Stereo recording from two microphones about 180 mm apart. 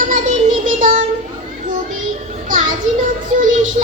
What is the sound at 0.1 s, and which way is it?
Child singing, 45° right (ahead or behind).